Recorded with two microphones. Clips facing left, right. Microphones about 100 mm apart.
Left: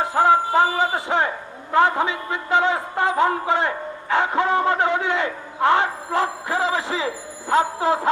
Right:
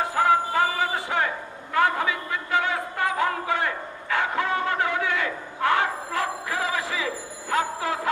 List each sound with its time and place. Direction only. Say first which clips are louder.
0.0 s music: left 4 dB; 25° left (ahead or behind)
1.7 s a man's voice: left 4 dB; 25° left (ahead or behind)
7.5 s a sound: left 6 dB; 25° left (ahead or behind)